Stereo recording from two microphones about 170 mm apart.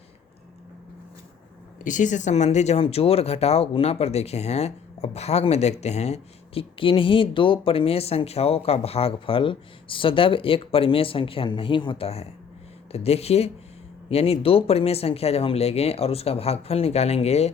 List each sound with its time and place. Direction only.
1.8 s speech: 50° left (ahead or behind)